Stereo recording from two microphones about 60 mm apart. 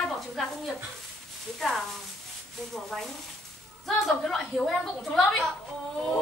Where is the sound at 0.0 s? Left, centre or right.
Centre.